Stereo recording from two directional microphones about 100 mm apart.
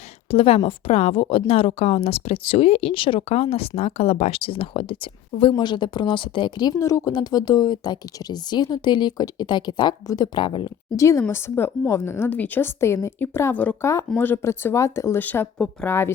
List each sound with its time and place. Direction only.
0.3 s speech: 75° left (ahead or behind); by 6.7 s 50° left (ahead or behind)
6.7 s a woman's voice: 30° left (ahead or behind)
7.1 s speech: 45° left (ahead or behind)
10.9 s speech: 30° left (ahead or behind)
15.2 s speech: 15° left (ahead or behind)